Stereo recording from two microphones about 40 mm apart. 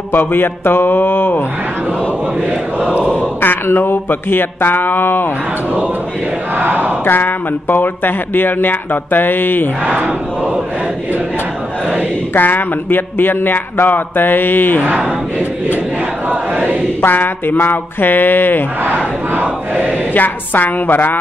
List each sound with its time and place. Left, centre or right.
0.1 s speech: left
2.8 s speech: right
3.3 s speech: left
6.6 s a sound: right
7.1 s speech: left
12.4 s speech: left
16.3 s choir: right
17.0 s speech: left
20.2 s a woman's voice: left